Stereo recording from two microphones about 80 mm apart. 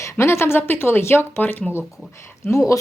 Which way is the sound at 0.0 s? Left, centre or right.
Left.